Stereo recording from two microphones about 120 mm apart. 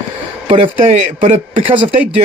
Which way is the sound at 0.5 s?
50° right (ahead or behind).